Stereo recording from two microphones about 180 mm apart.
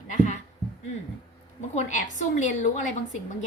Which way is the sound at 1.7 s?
45° left (ahead or behind).